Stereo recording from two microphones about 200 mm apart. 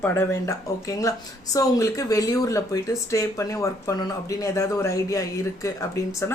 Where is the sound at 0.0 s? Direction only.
10° left (ahead or behind).